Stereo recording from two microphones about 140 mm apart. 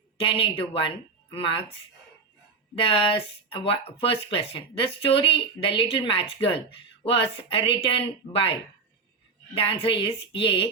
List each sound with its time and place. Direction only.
0.2 s speech: 40° left (ahead or behind)
2.7 s speech: 40° left (ahead or behind)
9.6 s speech: 40° left (ahead or behind)